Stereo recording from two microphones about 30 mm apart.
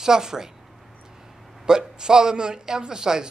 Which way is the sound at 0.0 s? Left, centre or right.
Centre.